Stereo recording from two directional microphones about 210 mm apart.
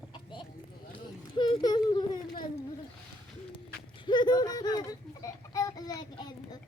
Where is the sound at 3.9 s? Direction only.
20° left (ahead or behind).